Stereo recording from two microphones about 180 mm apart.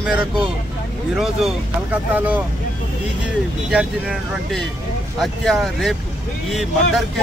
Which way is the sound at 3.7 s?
5° right (ahead or behind).